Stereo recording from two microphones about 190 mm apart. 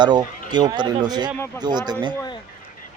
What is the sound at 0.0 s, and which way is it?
Speech, 20° right (ahead or behind).